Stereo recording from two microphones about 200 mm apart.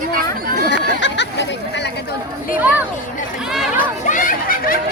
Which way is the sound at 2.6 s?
10° right (ahead or behind).